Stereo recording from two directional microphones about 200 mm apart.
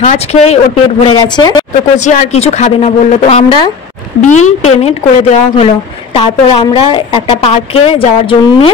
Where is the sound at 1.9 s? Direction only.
35° left (ahead or behind).